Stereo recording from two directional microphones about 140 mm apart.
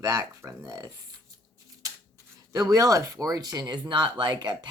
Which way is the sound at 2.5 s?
25° right (ahead or behind).